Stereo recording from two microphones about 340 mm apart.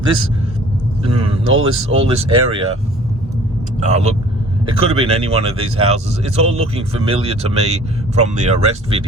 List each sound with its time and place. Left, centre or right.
1.5 s speech: right
1.9 s speech: centre
3.8 s speech: centre